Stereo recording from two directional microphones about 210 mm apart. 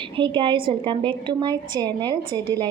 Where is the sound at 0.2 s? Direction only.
20° right (ahead or behind).